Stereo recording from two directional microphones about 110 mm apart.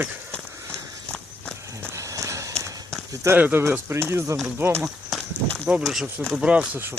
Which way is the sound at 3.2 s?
20° right (ahead or behind).